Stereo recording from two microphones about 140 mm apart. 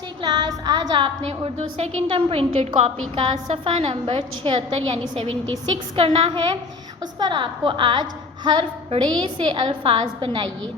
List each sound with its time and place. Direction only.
0.2 s music: 30° right (ahead or behind)
1.5 s a woman's voice: 50° right (ahead or behind); by 10.5 s 35° right (ahead or behind)